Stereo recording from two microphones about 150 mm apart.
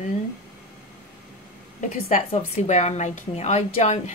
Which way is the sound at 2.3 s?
50° left (ahead or behind).